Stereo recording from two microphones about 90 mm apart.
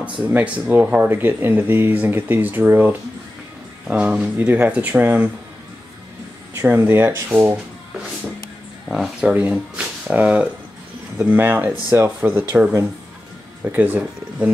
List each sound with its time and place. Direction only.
0.2 s speech: 15° right (ahead or behind)
3.8 s speech: 10° right (ahead or behind)
6.6 s speech: 20° right (ahead or behind)
8.9 s speech: 5° right (ahead or behind); by 12.6 s 25° right (ahead or behind)
13.7 s speech: 20° right (ahead or behind)